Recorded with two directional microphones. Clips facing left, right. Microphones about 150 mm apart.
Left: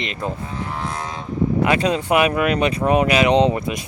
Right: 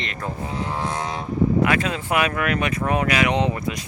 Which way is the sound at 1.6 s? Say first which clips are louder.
Left 3 dB; 25° left (ahead or behind).